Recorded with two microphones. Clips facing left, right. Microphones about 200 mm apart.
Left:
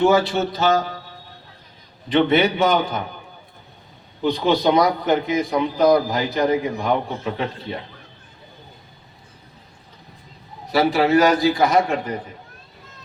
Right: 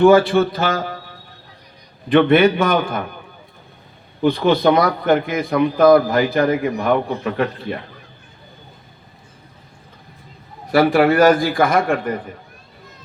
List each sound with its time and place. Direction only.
0.0 s a man's voice: 55° right (ahead or behind)
2.0 s a man's voice: 55° right (ahead or behind)
4.2 s a man's voice: 55° right (ahead or behind)
10.7 s a man's voice: 55° right (ahead or behind)